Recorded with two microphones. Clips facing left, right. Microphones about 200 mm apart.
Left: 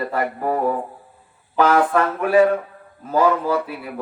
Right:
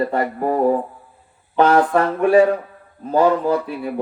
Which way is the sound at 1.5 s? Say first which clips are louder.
Right 2 dB; 35° right (ahead or behind).